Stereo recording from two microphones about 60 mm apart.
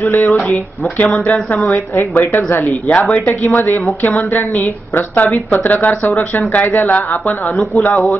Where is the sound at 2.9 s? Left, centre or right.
Left.